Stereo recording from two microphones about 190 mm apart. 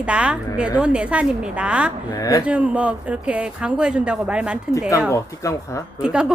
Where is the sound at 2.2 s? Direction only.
15° left (ahead or behind).